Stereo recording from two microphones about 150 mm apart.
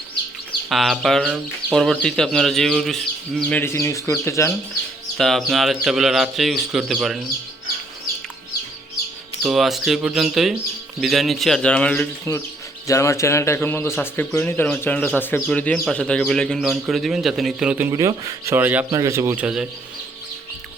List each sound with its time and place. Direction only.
0.7 s speech: centre (ahead or behind)
3.6 s speech: 15° left (ahead or behind)
5.1 s speech: centre (ahead or behind)
9.4 s a man's voice: centre (ahead or behind); by 19.5 s 15° right (ahead or behind)